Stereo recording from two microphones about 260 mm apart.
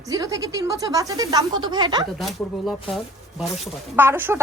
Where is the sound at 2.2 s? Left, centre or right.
Centre.